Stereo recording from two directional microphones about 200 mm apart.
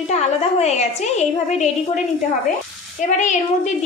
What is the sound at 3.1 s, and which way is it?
Speech, 40° left (ahead or behind).